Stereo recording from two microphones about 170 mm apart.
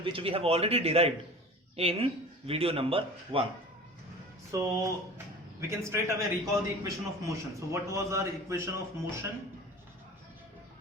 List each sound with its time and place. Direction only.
0.0 s speech: 30° right (ahead or behind)
4.5 s speech: 20° right (ahead or behind)